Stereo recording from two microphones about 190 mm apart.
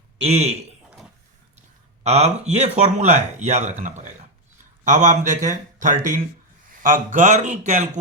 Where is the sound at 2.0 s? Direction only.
35° right (ahead or behind).